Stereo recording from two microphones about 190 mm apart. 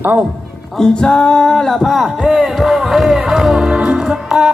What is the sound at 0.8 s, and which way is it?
Music, 5° left (ahead or behind).